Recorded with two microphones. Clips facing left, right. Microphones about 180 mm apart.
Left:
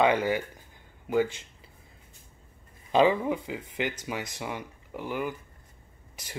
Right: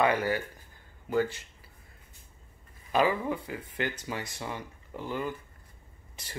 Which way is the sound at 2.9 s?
20° left (ahead or behind).